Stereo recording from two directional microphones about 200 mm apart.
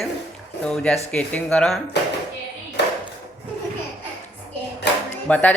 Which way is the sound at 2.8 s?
60° left (ahead or behind).